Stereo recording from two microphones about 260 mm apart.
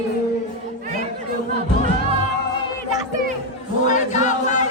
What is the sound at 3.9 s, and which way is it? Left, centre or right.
Music, left.